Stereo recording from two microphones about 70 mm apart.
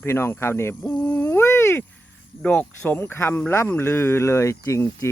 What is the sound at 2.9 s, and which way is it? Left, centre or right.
Speech, left.